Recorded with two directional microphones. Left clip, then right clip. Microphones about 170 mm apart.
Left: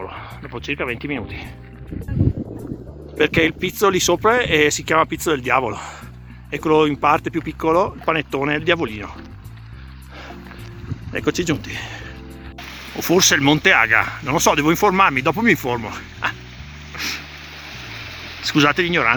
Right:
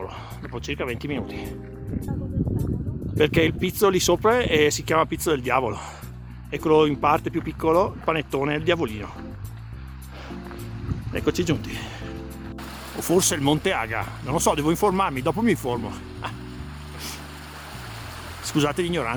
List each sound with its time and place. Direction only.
0.0 s speech: 5° right (ahead or behind)
3.2 s speech: 5° right (ahead or behind)
11.1 s speech: 5° right (ahead or behind)
13.0 s speech: 5° right (ahead or behind)
18.4 s speech: 10° right (ahead or behind)